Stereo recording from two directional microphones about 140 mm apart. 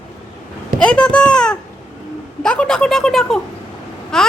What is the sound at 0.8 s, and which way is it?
Speech, 5° left (ahead or behind).